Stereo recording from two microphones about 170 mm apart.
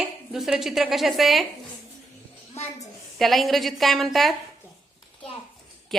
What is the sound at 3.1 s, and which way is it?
A woman's voice, centre (ahead or behind).